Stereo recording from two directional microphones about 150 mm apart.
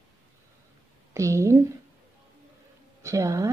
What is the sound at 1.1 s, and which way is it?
Speech, 20° right (ahead or behind).